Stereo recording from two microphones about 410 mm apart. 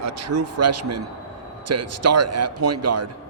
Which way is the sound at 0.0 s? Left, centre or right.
Right.